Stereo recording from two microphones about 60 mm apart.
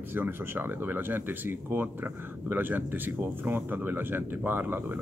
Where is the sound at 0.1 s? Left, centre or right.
Right.